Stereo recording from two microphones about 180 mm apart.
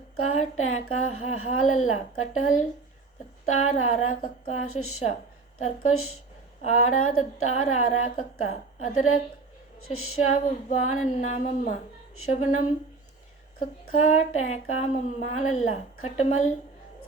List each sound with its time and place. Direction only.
0.3 s a woman's voice: 40° left (ahead or behind)